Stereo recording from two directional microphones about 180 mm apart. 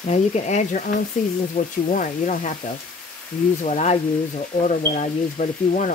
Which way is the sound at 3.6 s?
40° left (ahead or behind).